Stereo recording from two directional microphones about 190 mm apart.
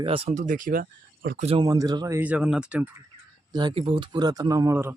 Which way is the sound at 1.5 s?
20° right (ahead or behind).